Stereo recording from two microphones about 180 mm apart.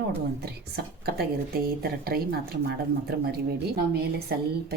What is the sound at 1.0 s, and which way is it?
Speech, 55° right (ahead or behind).